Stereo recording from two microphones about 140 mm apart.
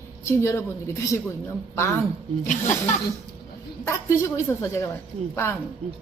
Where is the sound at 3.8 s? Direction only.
15° left (ahead or behind).